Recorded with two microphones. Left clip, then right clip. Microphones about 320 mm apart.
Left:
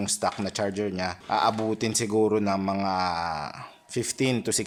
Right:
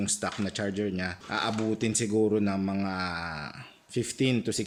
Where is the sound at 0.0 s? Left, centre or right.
Centre.